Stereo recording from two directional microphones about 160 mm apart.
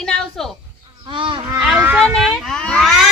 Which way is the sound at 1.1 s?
30° right (ahead or behind).